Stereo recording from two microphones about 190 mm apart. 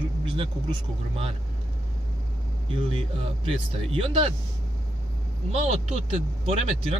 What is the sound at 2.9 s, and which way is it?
Speech, 30° right (ahead or behind).